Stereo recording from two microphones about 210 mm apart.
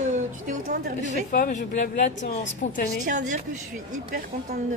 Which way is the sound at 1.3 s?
40° left (ahead or behind).